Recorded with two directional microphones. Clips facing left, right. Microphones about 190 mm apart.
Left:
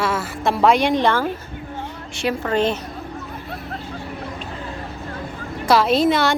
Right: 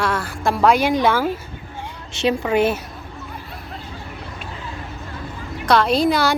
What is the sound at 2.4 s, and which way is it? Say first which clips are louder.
Speech: even; 10° right (ahead or behind).